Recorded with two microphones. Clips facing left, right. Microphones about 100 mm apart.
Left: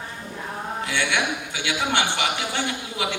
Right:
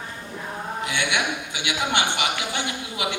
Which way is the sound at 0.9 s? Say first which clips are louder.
Left 1 dB; 20° right (ahead or behind).